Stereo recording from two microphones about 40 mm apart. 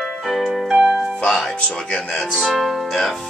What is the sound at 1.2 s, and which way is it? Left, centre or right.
Speech, centre.